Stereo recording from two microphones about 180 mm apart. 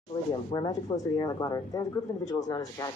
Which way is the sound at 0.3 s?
20° left (ahead or behind).